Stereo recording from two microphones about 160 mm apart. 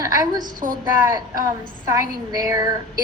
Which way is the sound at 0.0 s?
25° right (ahead or behind).